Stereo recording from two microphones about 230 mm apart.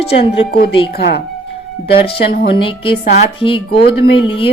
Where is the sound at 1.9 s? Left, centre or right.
Left.